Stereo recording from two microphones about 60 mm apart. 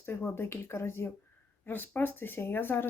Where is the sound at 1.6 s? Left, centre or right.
Left.